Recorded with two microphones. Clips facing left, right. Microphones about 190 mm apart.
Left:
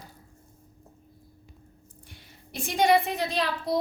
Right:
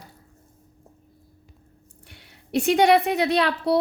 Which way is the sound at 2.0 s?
65° right (ahead or behind).